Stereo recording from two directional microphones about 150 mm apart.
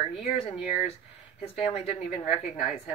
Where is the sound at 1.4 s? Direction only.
45° left (ahead or behind).